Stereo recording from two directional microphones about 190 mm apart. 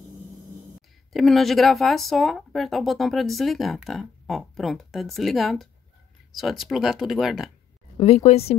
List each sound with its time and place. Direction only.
1.1 s speech: centre (ahead or behind)
8.0 s speech: 30° left (ahead or behind)